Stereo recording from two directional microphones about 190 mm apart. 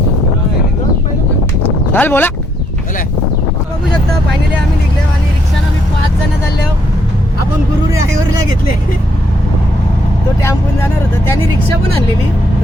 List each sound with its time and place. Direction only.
1.9 s speech: 10° left (ahead or behind)